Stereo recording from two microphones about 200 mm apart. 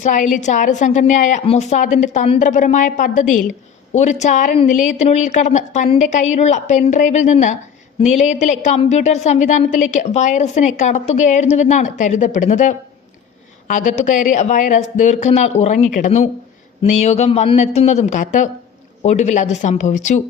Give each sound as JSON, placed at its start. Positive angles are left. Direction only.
{"t": 0.0, "sound": "a woman's voice", "side_deg": 40}